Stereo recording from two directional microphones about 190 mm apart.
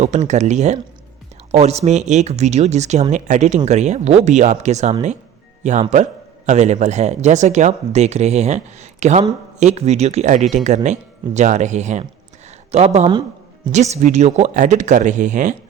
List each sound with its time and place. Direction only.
0.0 s speech: 40° right (ahead or behind)